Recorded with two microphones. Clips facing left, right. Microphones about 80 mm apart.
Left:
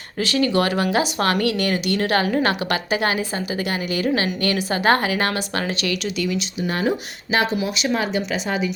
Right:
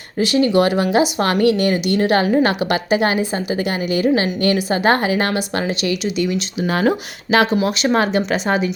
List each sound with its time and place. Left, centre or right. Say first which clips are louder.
0.2 s a woman's voice: right 5 dB; right
6.7 s speech: right 5 dB; right
7.8 s speech: right 5 dB; right